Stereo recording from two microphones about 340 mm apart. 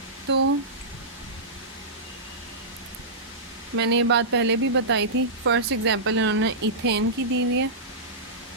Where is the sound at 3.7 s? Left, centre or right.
Right.